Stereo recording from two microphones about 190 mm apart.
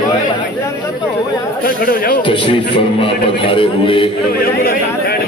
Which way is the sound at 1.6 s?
50° left (ahead or behind).